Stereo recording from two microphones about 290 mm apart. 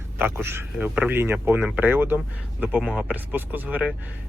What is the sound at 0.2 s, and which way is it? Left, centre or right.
Speech, centre.